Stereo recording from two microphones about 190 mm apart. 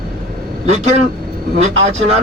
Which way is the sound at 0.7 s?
35° right (ahead or behind).